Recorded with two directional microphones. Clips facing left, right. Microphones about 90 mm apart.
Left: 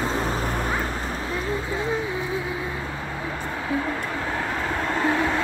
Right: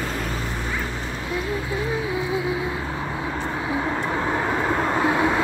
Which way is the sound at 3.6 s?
15° right (ahead or behind).